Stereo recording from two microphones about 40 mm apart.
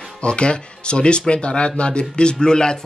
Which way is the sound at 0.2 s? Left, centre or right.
Left.